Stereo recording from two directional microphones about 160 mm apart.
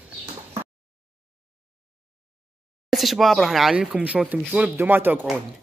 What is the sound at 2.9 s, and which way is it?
Speech, centre (ahead or behind).